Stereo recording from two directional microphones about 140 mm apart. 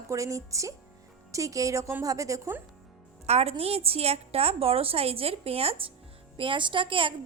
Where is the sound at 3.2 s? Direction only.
50° right (ahead or behind).